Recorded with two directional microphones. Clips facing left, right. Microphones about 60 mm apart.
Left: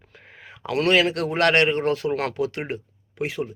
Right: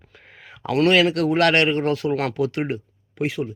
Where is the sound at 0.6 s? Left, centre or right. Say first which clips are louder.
Right 3 dB; centre.